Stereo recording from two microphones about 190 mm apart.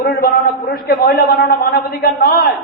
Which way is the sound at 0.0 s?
55° left (ahead or behind).